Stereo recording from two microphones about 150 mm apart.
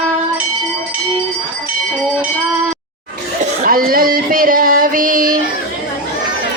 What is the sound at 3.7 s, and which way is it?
Child singing, 75° right (ahead or behind).